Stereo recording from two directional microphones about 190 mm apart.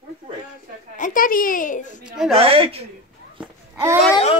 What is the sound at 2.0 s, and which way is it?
Speech, 5° right (ahead or behind).